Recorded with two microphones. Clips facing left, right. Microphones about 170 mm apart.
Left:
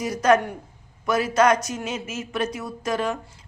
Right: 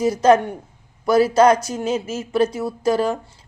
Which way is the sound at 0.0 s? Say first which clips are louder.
Right 5 dB; 30° right (ahead or behind).